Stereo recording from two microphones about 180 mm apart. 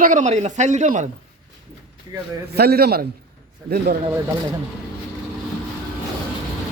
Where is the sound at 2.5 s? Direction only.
60° right (ahead or behind).